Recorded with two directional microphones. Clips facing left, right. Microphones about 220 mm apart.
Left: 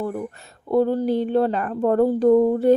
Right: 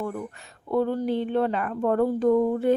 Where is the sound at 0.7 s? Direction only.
35° left (ahead or behind).